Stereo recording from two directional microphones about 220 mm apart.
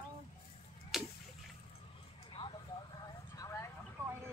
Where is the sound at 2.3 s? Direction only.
20° left (ahead or behind).